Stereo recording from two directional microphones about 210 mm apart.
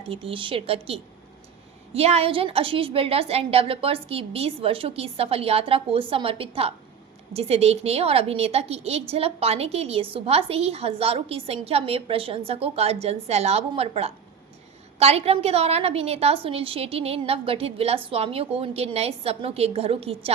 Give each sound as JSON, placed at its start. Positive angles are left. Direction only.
{"t": 0.0, "sound": "a woman's voice", "side_deg": -25}
{"t": 1.9, "sound": "a woman's voice", "side_deg": -30}